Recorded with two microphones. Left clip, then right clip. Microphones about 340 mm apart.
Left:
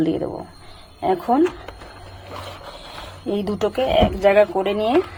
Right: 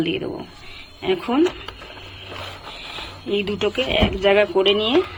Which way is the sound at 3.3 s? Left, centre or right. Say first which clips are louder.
Even; centre.